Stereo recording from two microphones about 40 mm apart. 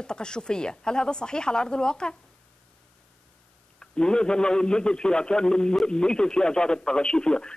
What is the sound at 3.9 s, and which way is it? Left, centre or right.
Speech, left.